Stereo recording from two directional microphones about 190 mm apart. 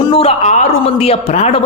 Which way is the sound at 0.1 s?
30° left (ahead or behind).